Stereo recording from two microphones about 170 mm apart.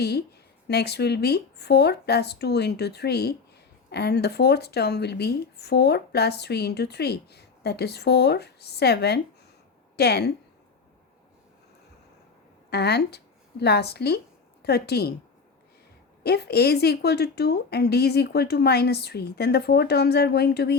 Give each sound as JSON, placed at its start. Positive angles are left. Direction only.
{"t": 0.0, "sound": "speech", "side_deg": 70}
{"t": 12.7, "sound": "a woman's voice", "side_deg": 70}
{"t": 16.2, "sound": "speech", "side_deg": 70}